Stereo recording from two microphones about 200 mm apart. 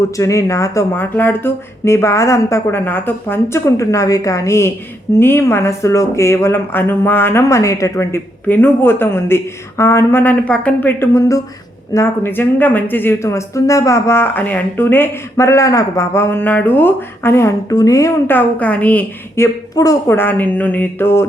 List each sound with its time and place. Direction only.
0.2 s speech: 15° left (ahead or behind)